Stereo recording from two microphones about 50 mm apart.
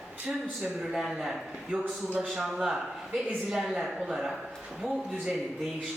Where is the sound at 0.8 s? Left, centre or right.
Centre.